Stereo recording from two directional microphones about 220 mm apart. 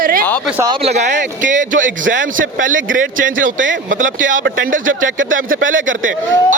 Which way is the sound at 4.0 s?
35° right (ahead or behind).